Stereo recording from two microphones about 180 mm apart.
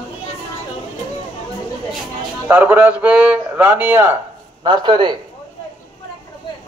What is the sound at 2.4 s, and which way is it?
A man's voice, 10° right (ahead or behind).